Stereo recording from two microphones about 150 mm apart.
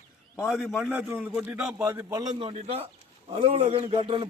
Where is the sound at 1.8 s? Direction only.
20° right (ahead or behind).